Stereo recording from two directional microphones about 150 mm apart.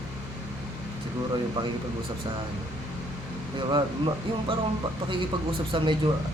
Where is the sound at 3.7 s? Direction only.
35° right (ahead or behind).